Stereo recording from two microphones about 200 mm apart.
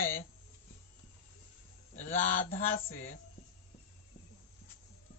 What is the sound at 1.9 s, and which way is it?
Speech, 35° left (ahead or behind).